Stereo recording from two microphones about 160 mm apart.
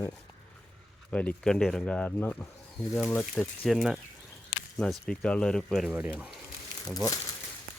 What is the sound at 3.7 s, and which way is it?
Speech, centre (ahead or behind).